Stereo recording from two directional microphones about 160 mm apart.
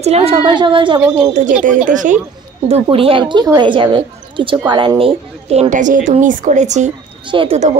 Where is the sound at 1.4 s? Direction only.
50° right (ahead or behind).